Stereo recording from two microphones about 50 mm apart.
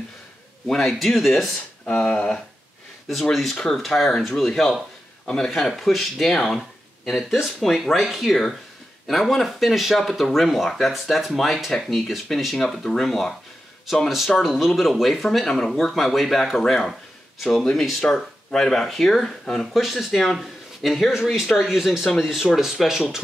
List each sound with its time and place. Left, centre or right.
0.7 s speech: centre
1.9 s speech: left
3.7 s speech: centre
14.0 s speech: centre
19.7 s speech: centre